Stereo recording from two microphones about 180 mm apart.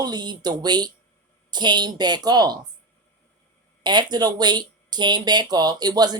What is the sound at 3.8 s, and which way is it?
Speech, 25° right (ahead or behind).